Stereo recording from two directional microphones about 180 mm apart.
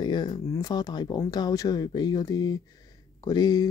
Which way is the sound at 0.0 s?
25° left (ahead or behind).